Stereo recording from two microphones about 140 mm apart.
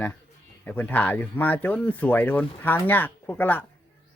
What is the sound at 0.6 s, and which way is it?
Speech, 15° left (ahead or behind).